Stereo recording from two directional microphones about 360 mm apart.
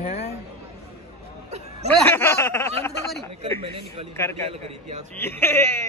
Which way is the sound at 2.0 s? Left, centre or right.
Centre.